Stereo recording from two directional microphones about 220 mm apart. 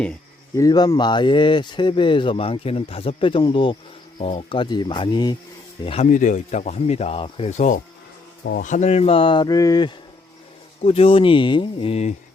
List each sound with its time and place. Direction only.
0.5 s speech: 15° left (ahead or behind)